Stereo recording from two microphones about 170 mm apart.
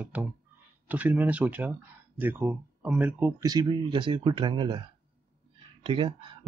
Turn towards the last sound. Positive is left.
turn(degrees=-30)  # may be behind; listen again after turning